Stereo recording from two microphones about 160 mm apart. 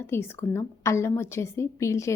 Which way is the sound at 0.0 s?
15° left (ahead or behind).